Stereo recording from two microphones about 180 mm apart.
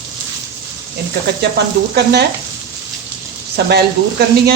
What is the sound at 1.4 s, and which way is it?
Sizzle, 70° right (ahead or behind).